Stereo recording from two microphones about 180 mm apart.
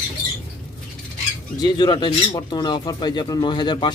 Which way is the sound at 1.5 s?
25° left (ahead or behind).